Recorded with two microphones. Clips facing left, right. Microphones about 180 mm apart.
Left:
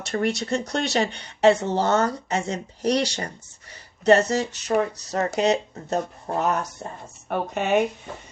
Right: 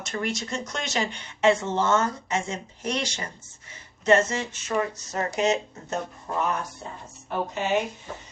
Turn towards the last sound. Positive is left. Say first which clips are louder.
# left 4 dB
turn(degrees=60)  # may be behind; listen again after turning